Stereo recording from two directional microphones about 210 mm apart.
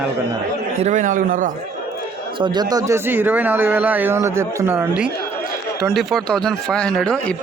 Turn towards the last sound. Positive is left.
turn(degrees=5)  # may be behind; listen again after turning